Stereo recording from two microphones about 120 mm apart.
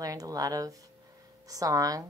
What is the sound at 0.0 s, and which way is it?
Speech, 30° right (ahead or behind).